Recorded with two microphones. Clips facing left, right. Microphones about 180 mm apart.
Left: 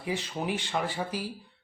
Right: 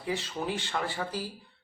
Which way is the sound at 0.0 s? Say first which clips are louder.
Left 1 dB; 15° left (ahead or behind).